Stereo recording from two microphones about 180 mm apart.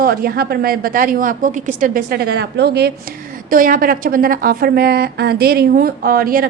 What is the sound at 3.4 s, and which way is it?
A woman's voice, 50° right (ahead or behind).